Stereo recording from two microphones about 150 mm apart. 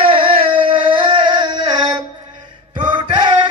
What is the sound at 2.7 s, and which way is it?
Music, 30° right (ahead or behind).